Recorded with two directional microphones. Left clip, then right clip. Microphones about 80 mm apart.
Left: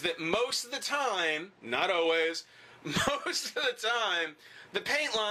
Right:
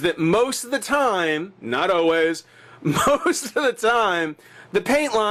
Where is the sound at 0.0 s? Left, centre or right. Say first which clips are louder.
Right 11 dB; right.